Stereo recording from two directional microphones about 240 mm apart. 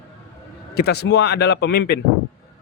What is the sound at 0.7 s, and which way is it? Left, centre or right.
Speech, left.